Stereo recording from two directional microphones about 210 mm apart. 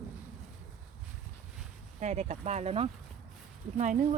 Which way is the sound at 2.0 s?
35° right (ahead or behind).